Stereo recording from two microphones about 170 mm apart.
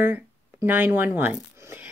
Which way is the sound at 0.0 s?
10° right (ahead or behind).